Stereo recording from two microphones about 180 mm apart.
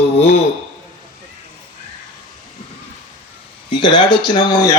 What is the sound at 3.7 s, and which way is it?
A man's voice, 25° left (ahead or behind).